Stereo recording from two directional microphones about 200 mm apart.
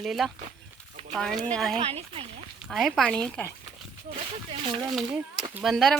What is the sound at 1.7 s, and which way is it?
Speech, 30° right (ahead or behind).